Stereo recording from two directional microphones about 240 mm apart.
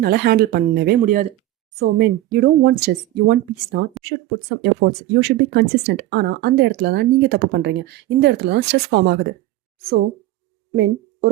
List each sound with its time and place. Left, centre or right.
0.0 s speech: right
10.8 s speech: right